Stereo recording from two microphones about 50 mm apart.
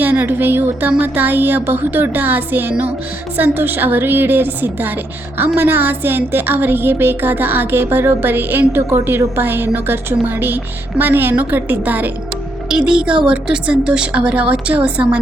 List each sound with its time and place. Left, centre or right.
0.0 s a woman's voice: right
12.6 s a woman's voice: centre